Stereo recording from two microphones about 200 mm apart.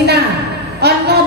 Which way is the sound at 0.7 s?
55° right (ahead or behind).